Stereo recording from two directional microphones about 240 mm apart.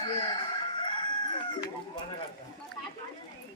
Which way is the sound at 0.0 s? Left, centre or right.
Centre.